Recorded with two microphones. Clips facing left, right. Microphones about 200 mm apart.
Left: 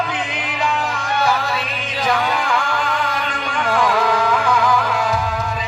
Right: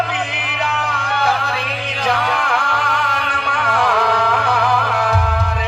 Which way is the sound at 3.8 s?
65° right (ahead or behind).